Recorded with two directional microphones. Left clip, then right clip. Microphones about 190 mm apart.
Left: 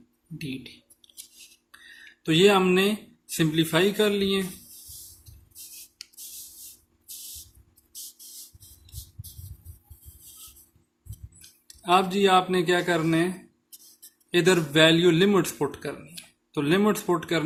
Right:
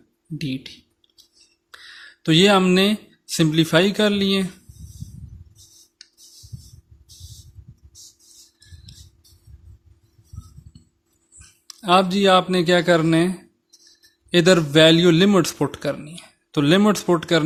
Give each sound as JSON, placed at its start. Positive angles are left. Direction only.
{"t": 0.3, "sound": "speech", "side_deg": -50}
{"t": 2.2, "sound": "speech", "side_deg": -50}
{"t": 11.7, "sound": "speech", "side_deg": -50}